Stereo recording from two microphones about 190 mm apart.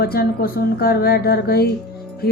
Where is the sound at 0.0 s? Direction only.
55° left (ahead or behind).